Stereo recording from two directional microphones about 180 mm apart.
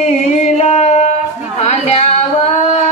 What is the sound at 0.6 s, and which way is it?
Music, 40° left (ahead or behind).